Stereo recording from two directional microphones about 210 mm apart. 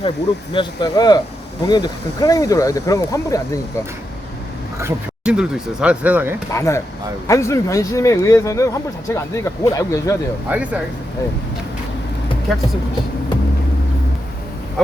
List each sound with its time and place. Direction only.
0.5 s speech: 20° left (ahead or behind)
4.8 s speech: 5° right (ahead or behind)
6.5 s speech: 15° left (ahead or behind)
10.5 s speech: 5° right (ahead or behind)